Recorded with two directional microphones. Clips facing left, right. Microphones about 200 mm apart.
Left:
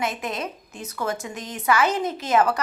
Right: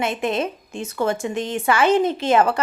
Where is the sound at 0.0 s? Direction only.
25° right (ahead or behind).